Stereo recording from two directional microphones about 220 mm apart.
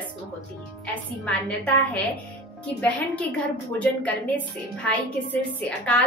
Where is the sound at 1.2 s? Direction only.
5° left (ahead or behind).